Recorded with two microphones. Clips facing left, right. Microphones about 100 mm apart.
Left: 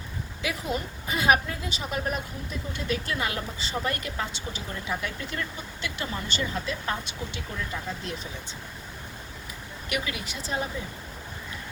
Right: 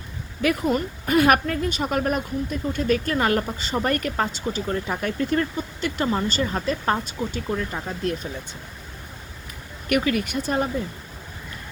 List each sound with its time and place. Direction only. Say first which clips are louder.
0.4 s speech: right 9 dB; 55° right (ahead or behind)
9.9 s speech: right 11 dB; 50° right (ahead or behind)